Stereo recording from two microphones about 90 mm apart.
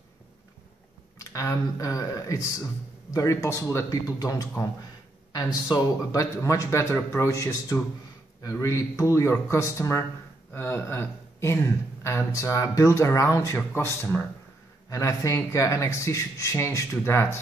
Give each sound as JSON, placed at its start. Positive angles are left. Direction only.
{"t": 1.1, "sound": "speech", "side_deg": 35}
{"t": 3.9, "sound": "speech", "side_deg": 40}
{"t": 14.9, "sound": "speech", "side_deg": 35}